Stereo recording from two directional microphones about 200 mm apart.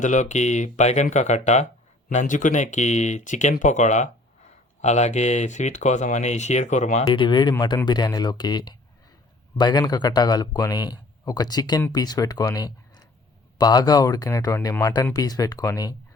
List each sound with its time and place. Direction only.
0.0 s speech: 40° left (ahead or behind)
7.1 s a man's voice: 25° left (ahead or behind)